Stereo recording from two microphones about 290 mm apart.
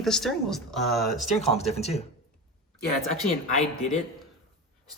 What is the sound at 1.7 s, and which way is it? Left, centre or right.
Speech, left.